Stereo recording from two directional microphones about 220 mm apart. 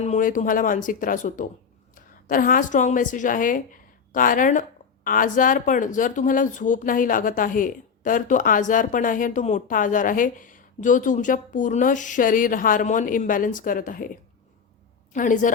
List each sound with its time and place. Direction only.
0.0 s a woman's voice: 35° left (ahead or behind)
15.1 s speech: 35° left (ahead or behind)